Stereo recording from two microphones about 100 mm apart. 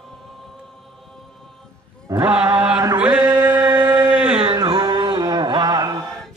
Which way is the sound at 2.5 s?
10° right (ahead or behind).